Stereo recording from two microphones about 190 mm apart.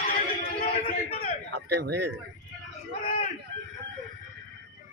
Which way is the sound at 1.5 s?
60° right (ahead or behind).